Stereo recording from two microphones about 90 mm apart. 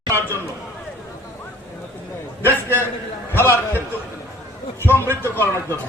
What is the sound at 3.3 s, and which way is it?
Speech, 25° left (ahead or behind).